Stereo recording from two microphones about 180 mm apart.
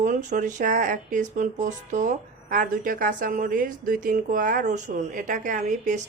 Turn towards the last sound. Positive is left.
turn(degrees=-45)  # may be behind; listen again after turning